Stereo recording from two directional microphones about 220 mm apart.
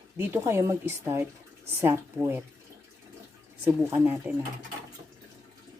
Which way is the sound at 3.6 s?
10° right (ahead or behind).